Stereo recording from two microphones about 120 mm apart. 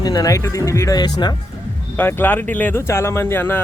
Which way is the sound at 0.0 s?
30° left (ahead or behind).